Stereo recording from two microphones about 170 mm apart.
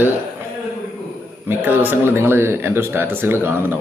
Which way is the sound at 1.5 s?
10° right (ahead or behind).